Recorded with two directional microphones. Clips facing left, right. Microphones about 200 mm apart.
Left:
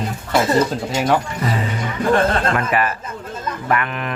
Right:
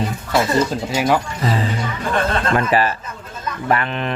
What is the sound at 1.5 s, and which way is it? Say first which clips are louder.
Speech: right 4 dB; 30° right (ahead or behind).